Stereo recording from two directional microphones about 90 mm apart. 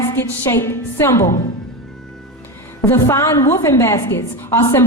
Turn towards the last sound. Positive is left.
turn(degrees=30)  # may be behind; listen again after turning